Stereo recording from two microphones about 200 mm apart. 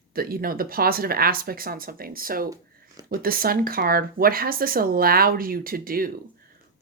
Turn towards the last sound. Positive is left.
turn(degrees=-45)  # may be behind; listen again after turning